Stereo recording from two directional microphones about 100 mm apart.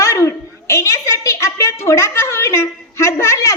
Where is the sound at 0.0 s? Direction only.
30° left (ahead or behind).